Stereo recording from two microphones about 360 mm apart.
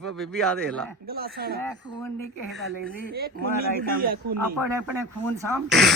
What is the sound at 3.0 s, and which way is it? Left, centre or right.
A woman's voice, right.